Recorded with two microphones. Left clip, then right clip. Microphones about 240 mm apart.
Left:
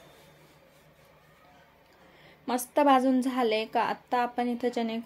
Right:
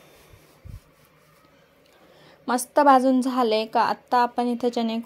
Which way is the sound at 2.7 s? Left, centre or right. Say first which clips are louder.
Right 6 dB; right.